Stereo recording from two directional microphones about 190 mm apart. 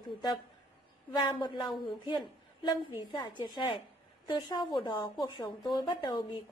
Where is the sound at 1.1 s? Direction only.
25° left (ahead or behind).